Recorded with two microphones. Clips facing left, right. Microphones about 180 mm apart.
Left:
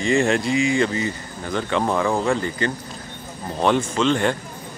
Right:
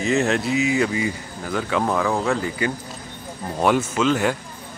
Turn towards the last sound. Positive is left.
turn(degrees=-5)  # may be behind; listen again after turning